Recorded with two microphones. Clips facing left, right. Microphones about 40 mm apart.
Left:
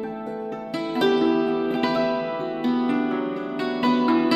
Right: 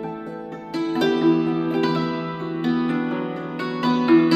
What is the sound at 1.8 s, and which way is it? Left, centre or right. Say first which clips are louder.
Music: even; centre.